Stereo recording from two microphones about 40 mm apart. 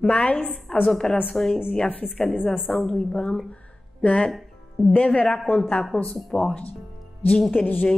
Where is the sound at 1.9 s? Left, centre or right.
Left.